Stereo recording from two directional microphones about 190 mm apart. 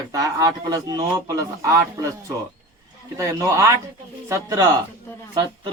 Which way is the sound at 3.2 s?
15° right (ahead or behind).